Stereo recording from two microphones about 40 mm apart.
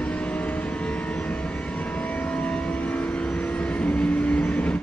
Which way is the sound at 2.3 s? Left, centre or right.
Left.